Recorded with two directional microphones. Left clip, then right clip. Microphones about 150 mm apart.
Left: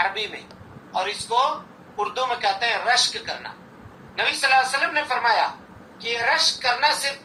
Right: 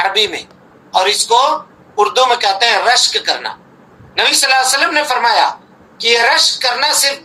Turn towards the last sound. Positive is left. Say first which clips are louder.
# right 7 dB
turn(degrees=-80)